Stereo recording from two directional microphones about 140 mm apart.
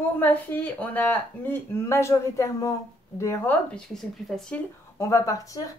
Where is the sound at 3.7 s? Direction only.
5° left (ahead or behind).